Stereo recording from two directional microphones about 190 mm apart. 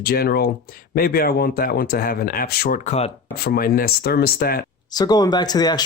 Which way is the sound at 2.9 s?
35° left (ahead or behind).